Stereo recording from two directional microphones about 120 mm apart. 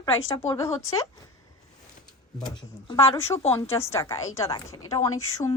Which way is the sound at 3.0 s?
25° left (ahead or behind).